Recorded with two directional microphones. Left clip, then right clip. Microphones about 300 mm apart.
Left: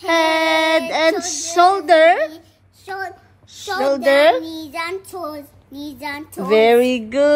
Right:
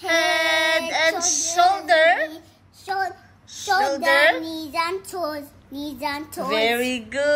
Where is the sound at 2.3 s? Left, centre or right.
Centre.